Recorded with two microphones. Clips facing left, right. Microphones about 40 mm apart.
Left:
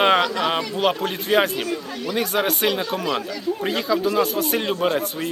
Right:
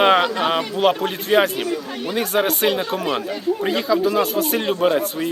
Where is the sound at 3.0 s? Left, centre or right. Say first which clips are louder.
Right 2 dB; right.